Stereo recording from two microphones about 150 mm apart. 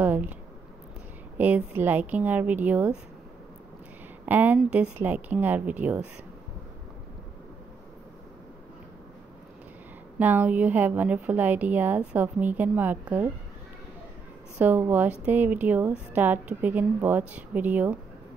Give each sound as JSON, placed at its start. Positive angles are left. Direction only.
{"t": 0.0, "sound": "a sound", "side_deg": -10}
{"t": 1.4, "sound": "a woman's voice", "side_deg": -15}
{"t": 4.3, "sound": "a woman's voice", "side_deg": -10}
{"t": 10.1, "sound": "a woman's voice", "side_deg": -10}
{"t": 14.6, "sound": "a woman's voice", "side_deg": -10}